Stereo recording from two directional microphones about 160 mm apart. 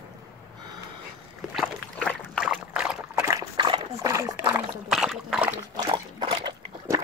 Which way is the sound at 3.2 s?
20° right (ahead or behind).